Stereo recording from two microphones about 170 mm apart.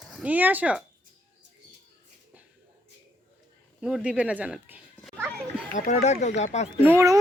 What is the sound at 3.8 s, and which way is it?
Speech, 5° right (ahead or behind).